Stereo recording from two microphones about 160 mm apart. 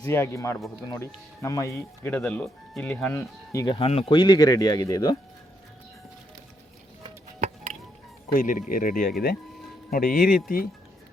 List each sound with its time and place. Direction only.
0.0 s speech: 15° left (ahead or behind)
3.8 s speech: 35° left (ahead or behind)
7.4 s music: 45° right (ahead or behind)
8.3 s speech: 55° left (ahead or behind)